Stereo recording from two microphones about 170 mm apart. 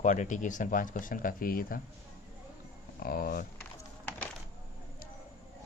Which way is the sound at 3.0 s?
60° left (ahead or behind).